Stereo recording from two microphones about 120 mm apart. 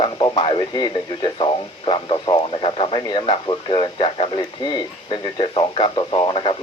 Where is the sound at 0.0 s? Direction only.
45° left (ahead or behind).